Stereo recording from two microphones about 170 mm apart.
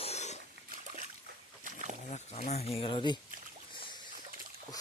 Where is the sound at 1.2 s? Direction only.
50° right (ahead or behind).